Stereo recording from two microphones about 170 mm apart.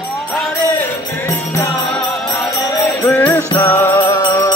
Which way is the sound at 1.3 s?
10° left (ahead or behind).